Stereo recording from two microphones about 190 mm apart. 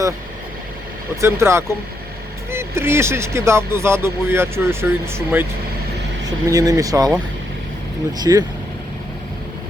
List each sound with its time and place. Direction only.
1.2 s speech: 15° right (ahead or behind)
8.2 s speech: 20° right (ahead or behind)